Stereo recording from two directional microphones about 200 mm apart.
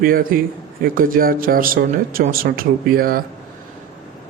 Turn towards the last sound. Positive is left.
turn(degrees=-45)  # may be behind; listen again after turning